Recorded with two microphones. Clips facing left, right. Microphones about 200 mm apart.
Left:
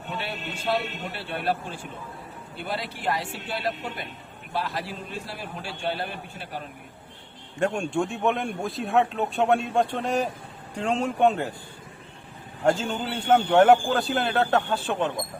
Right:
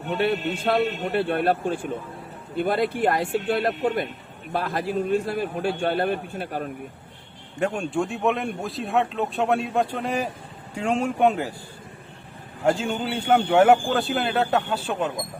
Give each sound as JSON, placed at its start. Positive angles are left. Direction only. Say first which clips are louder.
{"t": 0.1, "sound": "a man's voice", "louder": "right 11 dB", "side_deg": -55}
{"t": 7.6, "sound": "a man's voice", "louder": "even", "side_deg": -5}
{"t": 12.6, "sound": "a man's voice", "louder": "right 1 dB", "side_deg": -10}